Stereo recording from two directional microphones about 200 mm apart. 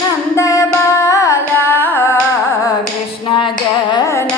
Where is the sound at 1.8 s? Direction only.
10° left (ahead or behind).